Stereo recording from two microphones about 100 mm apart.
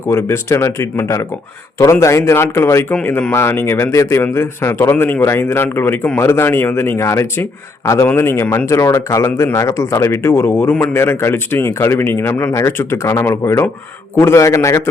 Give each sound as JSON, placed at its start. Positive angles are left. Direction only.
{"t": 0.0, "sound": "speech", "side_deg": 25}